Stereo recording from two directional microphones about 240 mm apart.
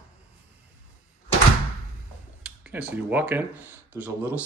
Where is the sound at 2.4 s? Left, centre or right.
Centre.